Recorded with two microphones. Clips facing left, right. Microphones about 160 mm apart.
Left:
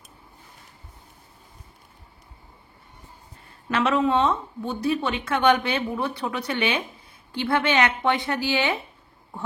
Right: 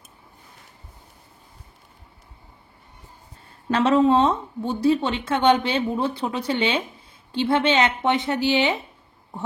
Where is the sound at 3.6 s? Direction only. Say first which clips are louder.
Right 4 dB; 35° right (ahead or behind).